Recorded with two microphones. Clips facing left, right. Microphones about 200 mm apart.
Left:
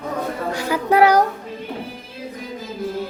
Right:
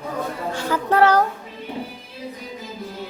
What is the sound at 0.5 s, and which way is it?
Child singing, 10° left (ahead or behind).